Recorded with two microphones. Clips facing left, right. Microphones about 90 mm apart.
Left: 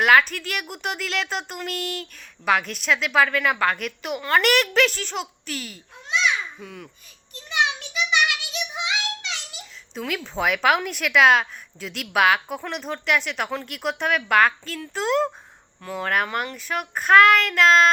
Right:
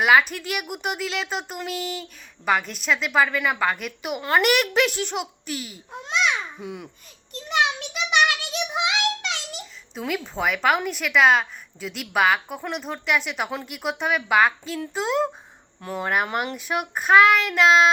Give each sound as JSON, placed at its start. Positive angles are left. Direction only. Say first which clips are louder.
{"t": 0.0, "sound": "a woman's voice", "louder": "even", "side_deg": -5}
{"t": 6.6, "sound": "a child's voice", "louder": "right 4 dB", "side_deg": -20}
{"t": 8.1, "sound": "a sound", "louder": "right 3 dB", "side_deg": -45}
{"t": 8.7, "sound": "child singing", "louder": "right 5 dB", "side_deg": -65}
{"t": 10.1, "sound": "a woman's voice", "louder": "left 1 dB", "side_deg": 0}